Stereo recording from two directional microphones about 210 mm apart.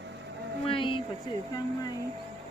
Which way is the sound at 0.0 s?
55° right (ahead or behind).